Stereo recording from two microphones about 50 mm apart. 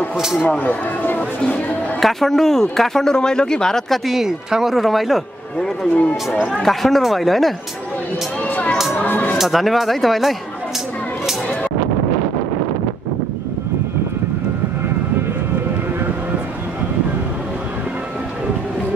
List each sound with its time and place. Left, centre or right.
0.5 s speech: left
2.0 s speech: centre
4.1 s speech: centre
4.7 s speech: centre
5.9 s speech: left
6.5 s speech: centre
8.9 s speech: left
9.4 s speech: centre